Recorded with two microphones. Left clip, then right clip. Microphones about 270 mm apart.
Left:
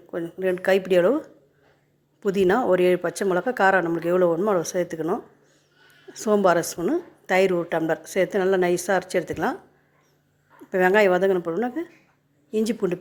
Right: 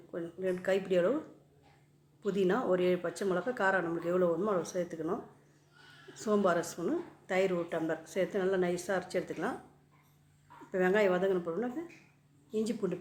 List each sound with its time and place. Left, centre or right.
0.1 s a woman's voice: left
2.2 s a woman's voice: left
10.7 s a woman's voice: left